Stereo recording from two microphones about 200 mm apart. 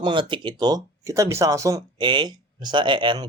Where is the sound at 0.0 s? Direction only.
25° right (ahead or behind).